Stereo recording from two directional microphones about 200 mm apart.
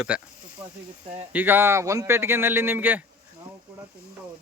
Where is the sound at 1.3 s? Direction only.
10° right (ahead or behind).